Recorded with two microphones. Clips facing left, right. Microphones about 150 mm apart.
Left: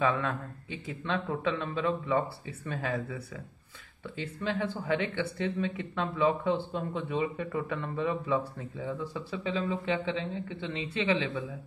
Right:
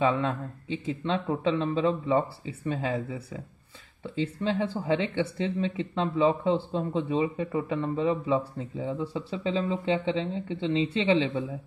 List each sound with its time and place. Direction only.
0.0 s speech: 25° right (ahead or behind)